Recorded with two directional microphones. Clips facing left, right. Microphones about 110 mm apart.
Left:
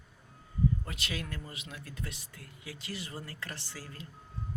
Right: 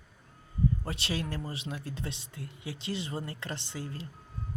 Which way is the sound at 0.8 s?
30° right (ahead or behind).